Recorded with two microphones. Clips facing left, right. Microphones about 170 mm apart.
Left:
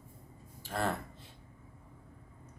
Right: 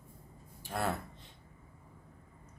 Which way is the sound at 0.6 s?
5° right (ahead or behind).